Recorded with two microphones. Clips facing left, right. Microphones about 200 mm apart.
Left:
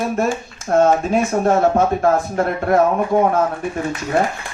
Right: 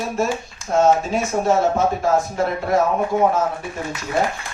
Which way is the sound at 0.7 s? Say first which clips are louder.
Left 2 dB; 55° left (ahead or behind).